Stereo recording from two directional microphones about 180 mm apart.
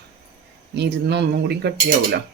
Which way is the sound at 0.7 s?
70° right (ahead or behind).